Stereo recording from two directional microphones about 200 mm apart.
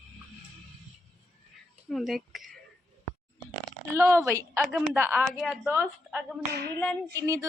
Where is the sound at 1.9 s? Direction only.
Centre (ahead or behind).